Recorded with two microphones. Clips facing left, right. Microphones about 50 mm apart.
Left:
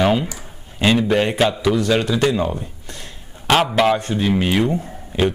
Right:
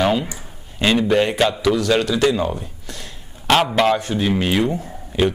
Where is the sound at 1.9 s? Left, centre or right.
Left.